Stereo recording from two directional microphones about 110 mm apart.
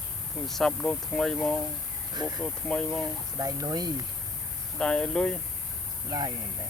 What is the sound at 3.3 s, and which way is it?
Speech, 35° right (ahead or behind).